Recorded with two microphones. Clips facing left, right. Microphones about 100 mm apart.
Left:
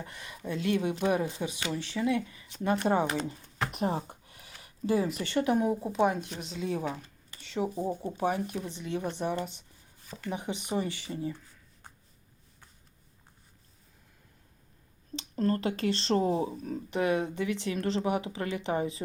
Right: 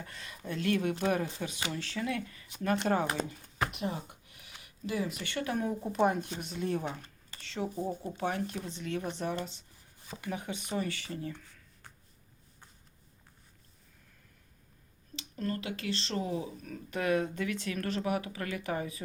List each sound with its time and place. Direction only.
0.0 s speech: 20° left (ahead or behind)
3.7 s a sound: 40° left (ahead or behind)
5.1 s speech: 30° left (ahead or behind)
5.8 s speech: 5° left (ahead or behind); by 11.9 s 20° left (ahead or behind)
15.1 s speech: 35° left (ahead or behind)